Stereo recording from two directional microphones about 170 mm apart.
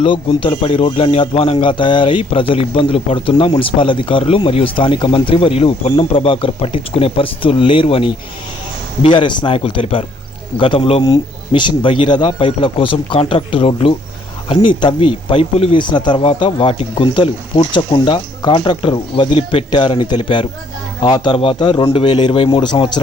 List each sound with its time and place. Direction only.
0.0 s a man's voice: 30° left (ahead or behind)